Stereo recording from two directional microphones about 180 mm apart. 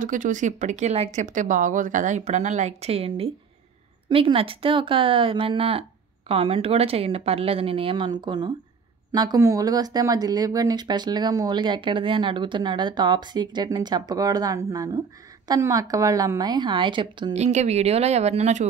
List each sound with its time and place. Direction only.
0.0 s speech: 45° right (ahead or behind); by 17.5 s 25° right (ahead or behind)
17.5 s speech: 40° right (ahead or behind)